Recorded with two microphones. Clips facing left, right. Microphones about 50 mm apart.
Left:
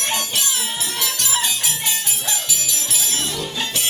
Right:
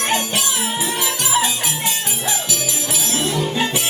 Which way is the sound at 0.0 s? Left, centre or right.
Right.